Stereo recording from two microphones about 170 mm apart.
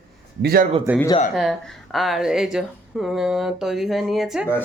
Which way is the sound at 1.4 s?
Centre (ahead or behind).